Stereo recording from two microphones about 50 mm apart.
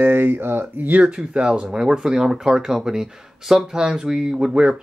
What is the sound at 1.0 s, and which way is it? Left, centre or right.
Speech, centre.